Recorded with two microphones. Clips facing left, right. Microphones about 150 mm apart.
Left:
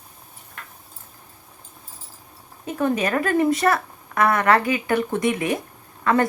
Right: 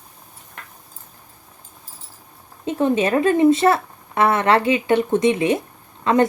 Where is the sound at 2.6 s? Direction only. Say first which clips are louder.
Right 4 dB; 25° right (ahead or behind).